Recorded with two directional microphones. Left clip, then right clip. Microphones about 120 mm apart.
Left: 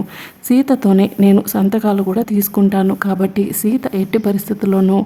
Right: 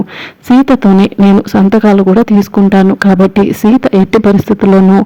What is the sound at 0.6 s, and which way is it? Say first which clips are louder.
Speech: right 5 dB; 35° right (ahead or behind).